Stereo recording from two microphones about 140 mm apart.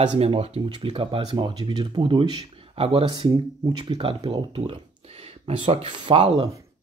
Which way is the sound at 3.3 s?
30° right (ahead or behind).